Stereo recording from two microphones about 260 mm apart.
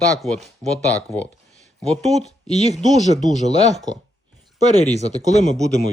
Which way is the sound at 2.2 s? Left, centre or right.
Left.